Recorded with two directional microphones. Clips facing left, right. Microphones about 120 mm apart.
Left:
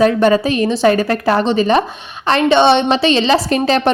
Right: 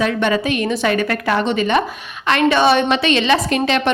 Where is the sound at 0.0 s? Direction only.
40° left (ahead or behind).